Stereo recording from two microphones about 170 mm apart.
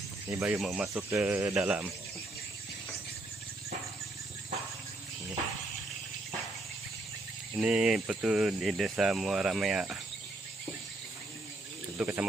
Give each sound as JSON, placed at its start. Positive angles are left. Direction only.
{"t": 0.3, "sound": "speech", "side_deg": -15}
{"t": 0.6, "sound": "speech", "side_deg": -5}
{"t": 7.6, "sound": "speech", "side_deg": -5}
{"t": 11.9, "sound": "speech", "side_deg": -10}